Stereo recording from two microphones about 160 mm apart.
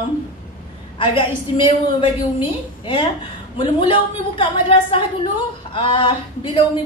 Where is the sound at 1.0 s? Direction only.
30° left (ahead or behind).